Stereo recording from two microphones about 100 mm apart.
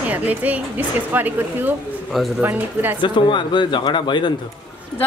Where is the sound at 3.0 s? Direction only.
50° left (ahead or behind).